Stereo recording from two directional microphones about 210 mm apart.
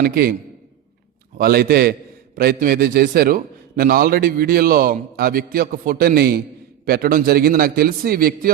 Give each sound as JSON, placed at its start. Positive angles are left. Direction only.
{"t": 0.0, "sound": "a man's voice", "side_deg": -45}
{"t": 1.4, "sound": "a man's voice", "side_deg": -45}